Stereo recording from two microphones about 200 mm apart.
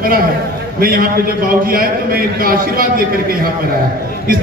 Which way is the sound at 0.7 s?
50° right (ahead or behind).